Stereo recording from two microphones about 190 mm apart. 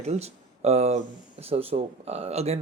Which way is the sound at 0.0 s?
35° right (ahead or behind).